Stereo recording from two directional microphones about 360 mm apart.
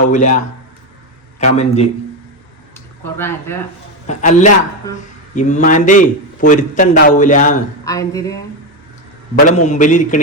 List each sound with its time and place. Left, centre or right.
0.0 s a man's voice: left
3.2 s a man's voice: centre
4.0 s a man's voice: centre
7.9 s a man's voice: centre
9.5 s a man's voice: centre